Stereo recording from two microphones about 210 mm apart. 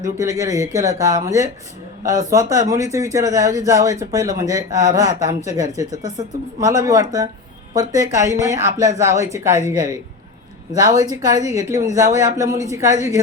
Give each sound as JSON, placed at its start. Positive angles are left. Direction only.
{"t": 0.2, "sound": "speech", "side_deg": -15}